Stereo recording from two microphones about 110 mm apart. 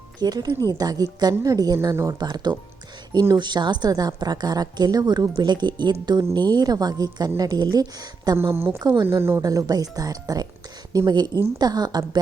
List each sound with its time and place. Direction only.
0.2 s a woman's voice: 40° right (ahead or behind)
8.5 s a woman's voice: 20° right (ahead or behind)
9.4 s a woman's voice: 35° right (ahead or behind)